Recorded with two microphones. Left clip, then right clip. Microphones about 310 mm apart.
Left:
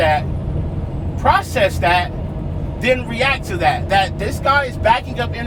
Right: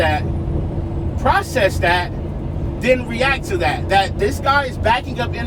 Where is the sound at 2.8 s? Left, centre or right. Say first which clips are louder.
Even; left.